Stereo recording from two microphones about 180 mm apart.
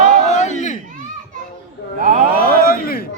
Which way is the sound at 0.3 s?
40° left (ahead or behind).